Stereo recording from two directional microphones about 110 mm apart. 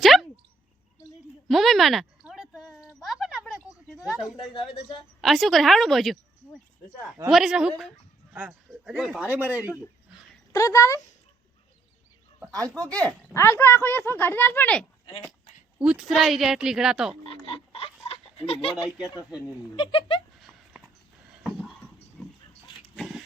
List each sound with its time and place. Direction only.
0.0 s a sound: centre (ahead or behind)
1.5 s a sound: centre (ahead or behind)
4.0 s a woman's voice: 5° right (ahead or behind)
9.2 s speech: 15° right (ahead or behind)
10.5 s speech: 30° left (ahead or behind)
12.5 s speech: 30° right (ahead or behind)
13.3 s speech: 25° left (ahead or behind)
15.8 s speech: 5° right (ahead or behind)
17.2 s oink: 55° left (ahead or behind)
19.7 s speech: 50° left (ahead or behind)
20.4 s dog: centre (ahead or behind)
21.4 s a sound: 5° left (ahead or behind)
23.0 s dog: 5° right (ahead or behind)